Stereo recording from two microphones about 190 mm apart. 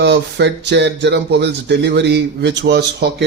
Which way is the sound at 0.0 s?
65° right (ahead or behind).